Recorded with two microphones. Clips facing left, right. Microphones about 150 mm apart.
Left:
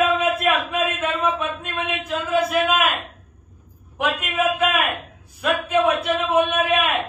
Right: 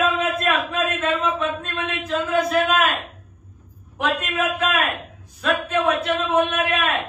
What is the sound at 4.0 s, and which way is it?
A man's voice, 10° left (ahead or behind).